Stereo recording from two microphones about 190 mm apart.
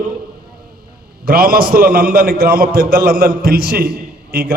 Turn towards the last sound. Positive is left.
turn(degrees=-55)  # may be behind; listen again after turning